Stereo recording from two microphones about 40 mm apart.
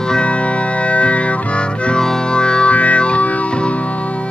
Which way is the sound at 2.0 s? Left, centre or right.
Centre.